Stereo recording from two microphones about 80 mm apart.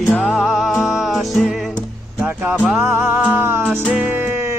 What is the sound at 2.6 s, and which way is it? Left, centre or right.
Music, centre.